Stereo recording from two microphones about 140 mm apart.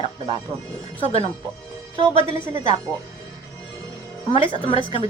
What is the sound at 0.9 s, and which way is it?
Speech, 45° left (ahead or behind).